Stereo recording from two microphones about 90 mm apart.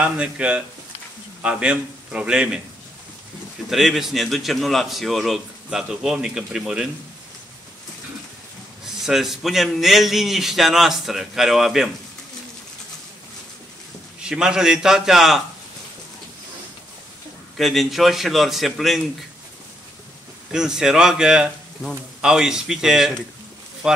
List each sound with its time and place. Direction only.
0.0 s a man's voice: 15° right (ahead or behind)
3.7 s a man's voice: 5° right (ahead or behind)
8.8 s a man's voice: 5° right (ahead or behind)
14.2 s a man's voice: 10° right (ahead or behind)
17.6 s a man's voice: centre (ahead or behind)
20.5 s a man's voice: 5° right (ahead or behind)